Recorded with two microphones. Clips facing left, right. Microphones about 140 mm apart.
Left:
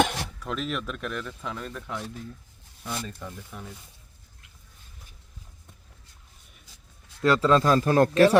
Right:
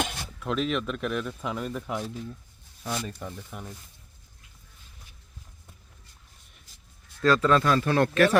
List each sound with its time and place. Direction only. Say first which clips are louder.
0.0 s a sound: left 7 dB; 75° left (ahead or behind)
0.3 s speech: right 7 dB; centre (ahead or behind)
3.2 s speech: right 1 dB; 15° right (ahead or behind)
7.2 s speech: left 1 dB; 20° left (ahead or behind)
7.6 s speech: left 3 dB; 35° left (ahead or behind)